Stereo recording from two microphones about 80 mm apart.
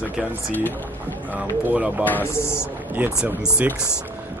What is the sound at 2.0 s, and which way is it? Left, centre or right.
Speech, left.